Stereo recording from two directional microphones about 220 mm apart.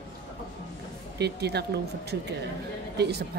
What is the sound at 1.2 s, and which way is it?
Speech, 50° right (ahead or behind).